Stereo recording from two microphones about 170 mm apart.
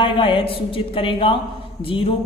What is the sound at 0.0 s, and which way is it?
A man's voice, 30° left (ahead or behind).